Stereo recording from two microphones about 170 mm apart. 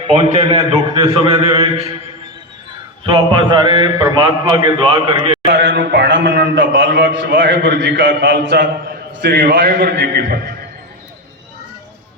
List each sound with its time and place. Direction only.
0.1 s a man's voice: 35° right (ahead or behind)
3.1 s a man's voice: 25° right (ahead or behind)
5.5 s a sound: 90° right; by 10.3 s 65° right (ahead or behind)